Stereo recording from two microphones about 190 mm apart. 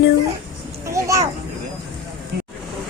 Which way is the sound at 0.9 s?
15° right (ahead or behind).